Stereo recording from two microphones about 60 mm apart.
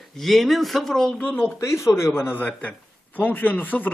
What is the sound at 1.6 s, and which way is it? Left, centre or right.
Speech, left.